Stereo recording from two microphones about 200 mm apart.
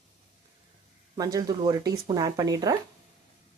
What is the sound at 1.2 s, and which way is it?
Speech, 20° right (ahead or behind).